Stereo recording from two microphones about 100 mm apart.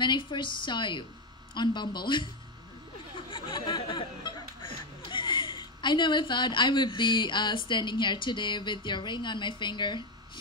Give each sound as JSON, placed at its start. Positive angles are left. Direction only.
{"t": 0.0, "sound": "a woman's voice", "side_deg": 50}
{"t": 3.3, "sound": "speech", "side_deg": 55}